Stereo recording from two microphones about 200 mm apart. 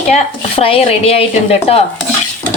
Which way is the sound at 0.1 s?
30° left (ahead or behind).